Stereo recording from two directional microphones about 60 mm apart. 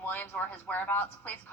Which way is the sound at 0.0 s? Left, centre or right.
Left.